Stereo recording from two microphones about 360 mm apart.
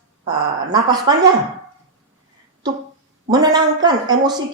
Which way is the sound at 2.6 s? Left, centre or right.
Centre.